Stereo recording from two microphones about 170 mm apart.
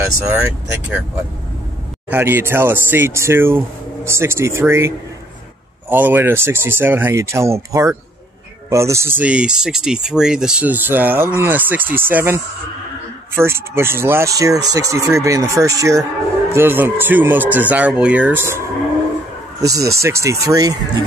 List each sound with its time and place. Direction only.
0.0 s speech: 15° right (ahead or behind)
2.0 s speech: 15° right (ahead or behind)
19.6 s speech: 20° right (ahead or behind)